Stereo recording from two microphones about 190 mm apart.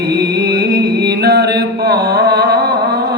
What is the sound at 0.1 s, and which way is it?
Music, 55° right (ahead or behind).